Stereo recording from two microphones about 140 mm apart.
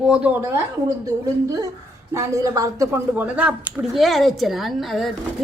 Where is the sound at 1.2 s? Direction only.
25° right (ahead or behind).